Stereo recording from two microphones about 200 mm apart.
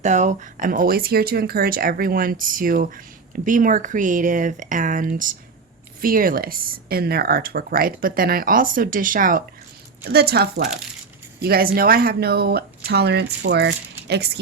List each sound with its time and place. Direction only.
0.0 s speech: 35° right (ahead or behind); by 14.3 s 55° right (ahead or behind)